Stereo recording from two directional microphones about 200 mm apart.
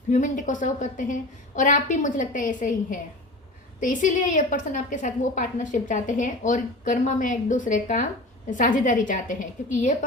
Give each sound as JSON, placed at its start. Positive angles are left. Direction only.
{"t": 0.1, "sound": "a woman's voice", "side_deg": 40}